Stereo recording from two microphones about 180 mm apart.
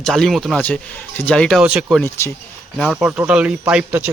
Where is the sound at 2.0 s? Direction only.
15° left (ahead or behind).